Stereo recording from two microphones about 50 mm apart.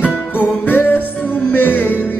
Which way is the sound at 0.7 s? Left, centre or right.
Left.